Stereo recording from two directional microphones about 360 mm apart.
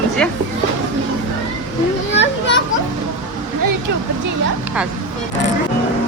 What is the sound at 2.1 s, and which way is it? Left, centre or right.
Speech, left.